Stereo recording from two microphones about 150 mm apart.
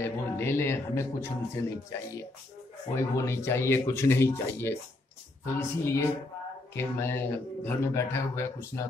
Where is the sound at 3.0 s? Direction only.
20° left (ahead or behind).